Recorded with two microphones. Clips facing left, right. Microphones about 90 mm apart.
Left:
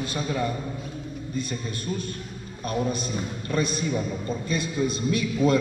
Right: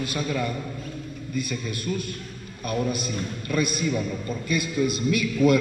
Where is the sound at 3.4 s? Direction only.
30° left (ahead or behind).